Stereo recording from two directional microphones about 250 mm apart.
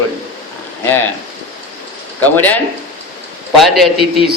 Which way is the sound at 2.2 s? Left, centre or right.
Centre.